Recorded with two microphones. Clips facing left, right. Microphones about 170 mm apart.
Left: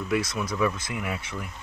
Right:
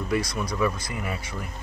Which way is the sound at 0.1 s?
5° left (ahead or behind).